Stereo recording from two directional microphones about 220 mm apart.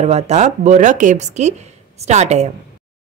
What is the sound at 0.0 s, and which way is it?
Speech, 30° right (ahead or behind).